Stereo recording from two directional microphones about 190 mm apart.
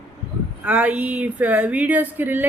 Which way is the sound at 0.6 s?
10° right (ahead or behind).